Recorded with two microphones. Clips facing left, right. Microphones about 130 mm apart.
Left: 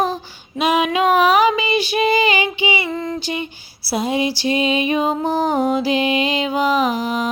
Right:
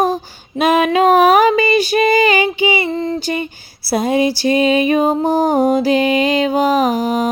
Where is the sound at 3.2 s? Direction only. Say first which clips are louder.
Right 4 dB; 45° right (ahead or behind).